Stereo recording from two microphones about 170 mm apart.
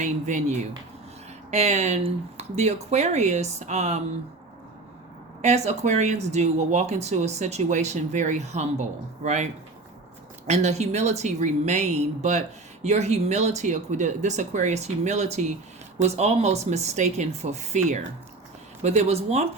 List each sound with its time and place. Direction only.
0.0 s speech: 45° right (ahead or behind)
5.4 s speech: 40° right (ahead or behind)